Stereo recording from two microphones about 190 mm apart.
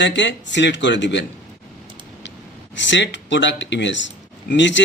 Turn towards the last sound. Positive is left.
turn(degrees=70)  # may be behind; listen again after turning